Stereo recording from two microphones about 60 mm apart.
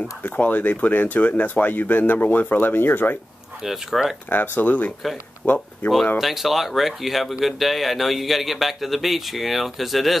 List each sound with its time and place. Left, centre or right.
0.2 s speech: left
3.6 s speech: centre
4.3 s speech: left
6.1 s speech: centre